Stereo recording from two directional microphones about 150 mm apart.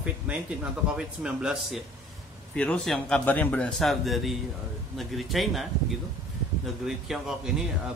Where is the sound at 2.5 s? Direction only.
5° left (ahead or behind).